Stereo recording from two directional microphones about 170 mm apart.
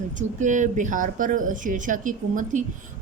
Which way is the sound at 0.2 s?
45° right (ahead or behind).